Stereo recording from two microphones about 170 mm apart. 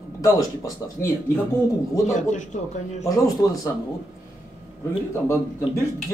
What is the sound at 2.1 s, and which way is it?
Speech, 45° left (ahead or behind).